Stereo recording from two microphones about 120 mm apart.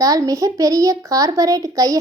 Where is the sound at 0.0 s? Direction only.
30° right (ahead or behind).